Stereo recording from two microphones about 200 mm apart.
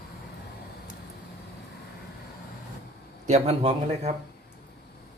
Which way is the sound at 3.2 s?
30° right (ahead or behind).